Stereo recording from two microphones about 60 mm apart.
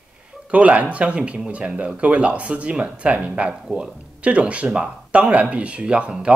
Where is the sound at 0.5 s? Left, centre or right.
Right.